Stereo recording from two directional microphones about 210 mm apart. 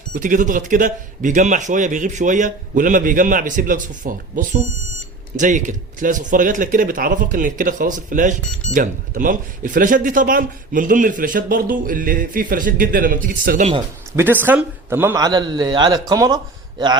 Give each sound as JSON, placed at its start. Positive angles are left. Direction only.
{"t": 0.1, "sound": "speech", "side_deg": -40}
{"t": 14.2, "sound": "a man's voice", "side_deg": -10}